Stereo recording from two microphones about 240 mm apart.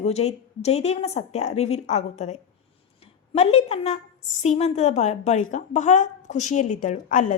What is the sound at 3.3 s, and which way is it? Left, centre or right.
A woman's voice, left.